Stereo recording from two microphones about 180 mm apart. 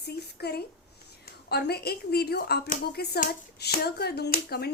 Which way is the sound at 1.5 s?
65° left (ahead or behind).